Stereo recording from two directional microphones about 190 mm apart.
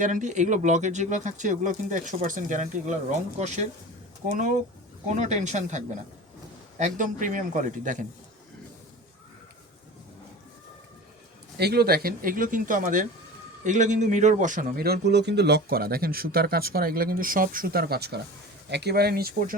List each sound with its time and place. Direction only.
0.0 s a man's voice: 40° right (ahead or behind)
11.5 s a man's voice: 55° right (ahead or behind)